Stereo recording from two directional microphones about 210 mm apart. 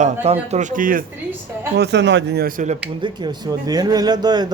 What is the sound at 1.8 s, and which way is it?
Speech, 55° right (ahead or behind).